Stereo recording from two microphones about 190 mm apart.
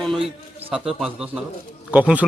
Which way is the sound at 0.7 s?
Centre (ahead or behind).